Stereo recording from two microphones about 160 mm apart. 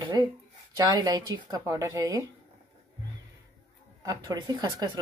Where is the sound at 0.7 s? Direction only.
25° right (ahead or behind).